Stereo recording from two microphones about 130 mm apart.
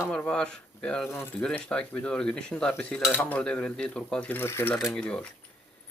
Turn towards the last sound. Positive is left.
turn(degrees=5)  # may be behind; listen again after turning